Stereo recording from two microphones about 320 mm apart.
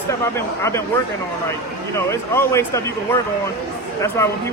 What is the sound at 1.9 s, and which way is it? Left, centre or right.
Speech, centre.